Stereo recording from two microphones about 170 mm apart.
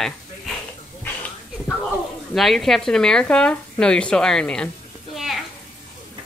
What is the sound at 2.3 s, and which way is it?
Speech, centre (ahead or behind).